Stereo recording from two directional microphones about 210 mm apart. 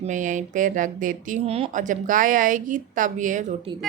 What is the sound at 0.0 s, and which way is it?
Speech, 35° right (ahead or behind).